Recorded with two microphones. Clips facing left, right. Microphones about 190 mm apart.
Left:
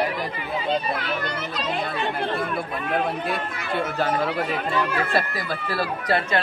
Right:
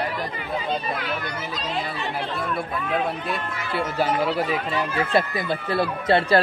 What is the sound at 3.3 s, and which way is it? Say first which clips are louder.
Speech: left 1 dB; 10° right (ahead or behind).